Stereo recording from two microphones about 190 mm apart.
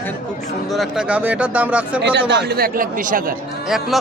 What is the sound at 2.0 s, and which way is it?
Speech, 65° right (ahead or behind).